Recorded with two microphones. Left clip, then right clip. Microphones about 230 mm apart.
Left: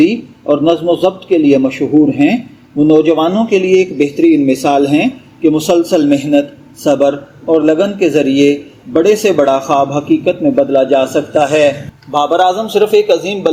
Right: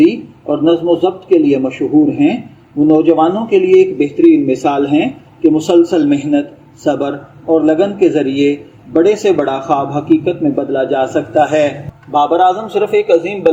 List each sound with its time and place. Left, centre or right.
0.6 s a man's voice: left